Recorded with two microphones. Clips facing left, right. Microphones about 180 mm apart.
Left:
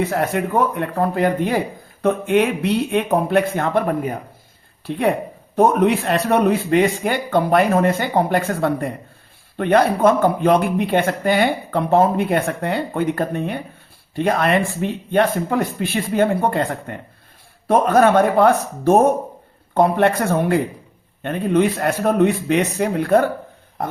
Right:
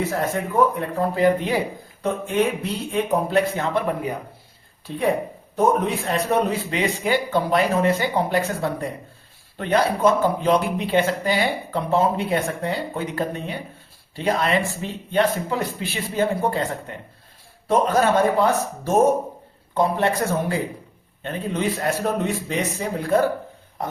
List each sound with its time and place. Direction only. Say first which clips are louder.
0.1 s speech: left 4 dB; 70° left (ahead or behind); by 4.1 s 50° left (ahead or behind)
5.5 s speech: left 5 dB; 70° left (ahead or behind)